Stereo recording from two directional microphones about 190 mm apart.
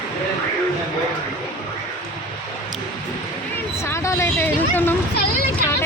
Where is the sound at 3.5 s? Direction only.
15° left (ahead or behind).